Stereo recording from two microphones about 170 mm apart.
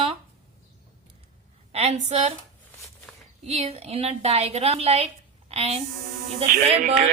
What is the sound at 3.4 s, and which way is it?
A woman's voice, 40° right (ahead or behind).